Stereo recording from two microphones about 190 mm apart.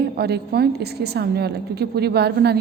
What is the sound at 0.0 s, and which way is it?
A woman's voice, 60° right (ahead or behind).